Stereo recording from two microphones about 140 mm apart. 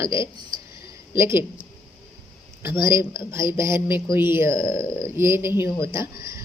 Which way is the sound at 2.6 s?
20° right (ahead or behind).